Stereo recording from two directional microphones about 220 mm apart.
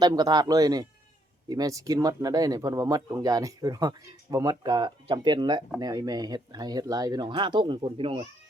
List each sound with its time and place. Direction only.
0.0 s speech: 20° right (ahead or behind)